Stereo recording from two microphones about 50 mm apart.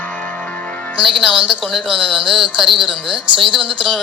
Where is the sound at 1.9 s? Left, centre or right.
Centre.